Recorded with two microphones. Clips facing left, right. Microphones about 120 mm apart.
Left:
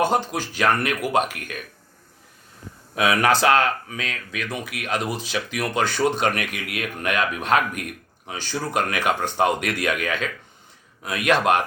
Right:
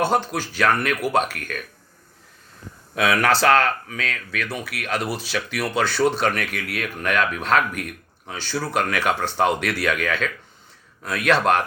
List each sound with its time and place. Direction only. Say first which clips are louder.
0.0 s a man's voice: even; 15° left (ahead or behind)
3.0 s a man's voice: even; 15° left (ahead or behind)